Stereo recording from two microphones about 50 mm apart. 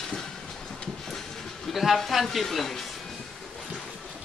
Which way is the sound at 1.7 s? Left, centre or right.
Centre.